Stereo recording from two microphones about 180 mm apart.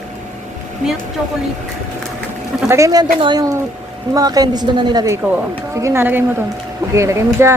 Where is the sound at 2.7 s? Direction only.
15° right (ahead or behind).